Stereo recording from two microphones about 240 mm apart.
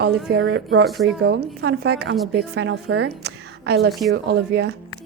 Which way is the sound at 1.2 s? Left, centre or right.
Right.